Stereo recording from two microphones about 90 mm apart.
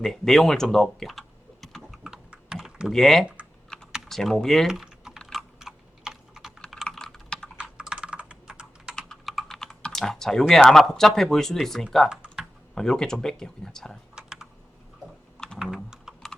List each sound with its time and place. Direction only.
0.0 s speech: 5° left (ahead or behind)
1.6 s typing: centre (ahead or behind)
7.6 s computer keyboard: 10° right (ahead or behind)
9.0 s typing: 5° left (ahead or behind)
10.5 s speech: 5° left (ahead or behind)
12.0 s typing: 10° right (ahead or behind)
12.7 s speech: 5° left (ahead or behind)
14.2 s typing: 5° right (ahead or behind)
15.7 s computer keyboard: 5° right (ahead or behind)